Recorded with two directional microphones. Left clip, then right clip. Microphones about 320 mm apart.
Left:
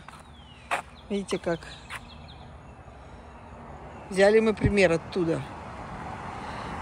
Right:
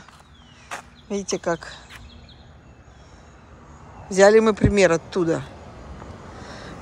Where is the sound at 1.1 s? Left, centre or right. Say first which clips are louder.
Right 5 dB; centre.